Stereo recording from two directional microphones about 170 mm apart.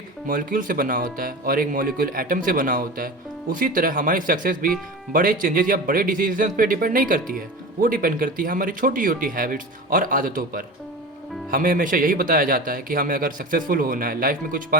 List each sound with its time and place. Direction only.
0.3 s a man's voice: 55° right (ahead or behind)